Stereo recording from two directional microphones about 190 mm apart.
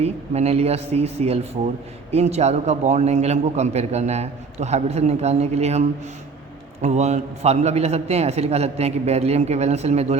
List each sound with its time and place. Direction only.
0.0 s a man's voice: 35° right (ahead or behind)
6.8 s a man's voice: 35° right (ahead or behind)